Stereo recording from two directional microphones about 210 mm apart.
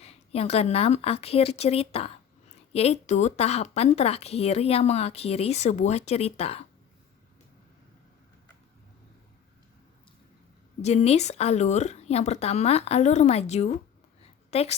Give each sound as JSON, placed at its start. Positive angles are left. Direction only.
{"t": 0.0, "sound": "speech", "side_deg": 30}
{"t": 10.8, "sound": "speech", "side_deg": 30}